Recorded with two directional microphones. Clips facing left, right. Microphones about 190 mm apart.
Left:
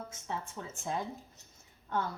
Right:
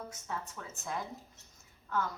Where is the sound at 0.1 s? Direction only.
25° left (ahead or behind).